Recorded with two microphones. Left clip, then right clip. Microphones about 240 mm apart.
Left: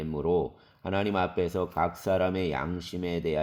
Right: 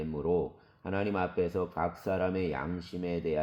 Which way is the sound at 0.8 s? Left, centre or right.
Left.